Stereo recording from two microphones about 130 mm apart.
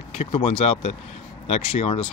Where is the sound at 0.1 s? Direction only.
55° left (ahead or behind).